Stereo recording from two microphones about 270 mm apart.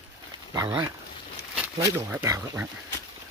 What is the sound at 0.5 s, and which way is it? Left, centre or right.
Speech, centre.